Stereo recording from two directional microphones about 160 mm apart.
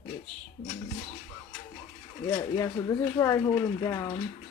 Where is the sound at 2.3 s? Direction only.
25° left (ahead or behind).